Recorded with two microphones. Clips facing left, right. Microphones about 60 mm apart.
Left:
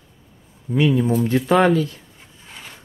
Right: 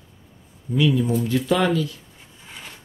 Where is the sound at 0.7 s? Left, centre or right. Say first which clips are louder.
Left 2 dB; left.